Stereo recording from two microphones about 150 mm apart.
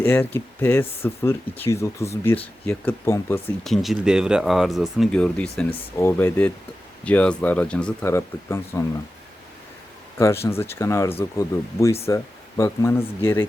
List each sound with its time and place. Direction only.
0.0 s speech: 15° left (ahead or behind)
3.6 s speech: centre (ahead or behind)
8.1 s speech: 20° left (ahead or behind)
10.2 s speech: 20° left (ahead or behind)